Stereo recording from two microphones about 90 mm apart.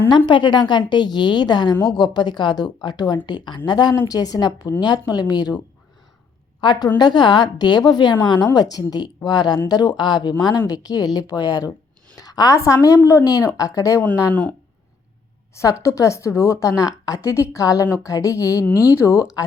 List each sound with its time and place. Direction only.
0.3 s a woman's voice: 60° left (ahead or behind)
6.6 s a woman's voice: 50° left (ahead or behind)
15.8 s a woman's voice: 35° left (ahead or behind)